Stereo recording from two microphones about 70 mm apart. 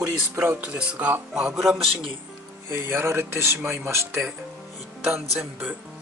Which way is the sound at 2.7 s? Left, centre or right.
Right.